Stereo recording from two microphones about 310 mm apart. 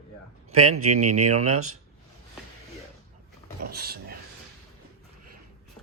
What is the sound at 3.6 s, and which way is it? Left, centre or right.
Speech, right.